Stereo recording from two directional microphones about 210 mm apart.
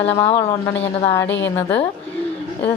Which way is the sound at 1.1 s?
15° left (ahead or behind).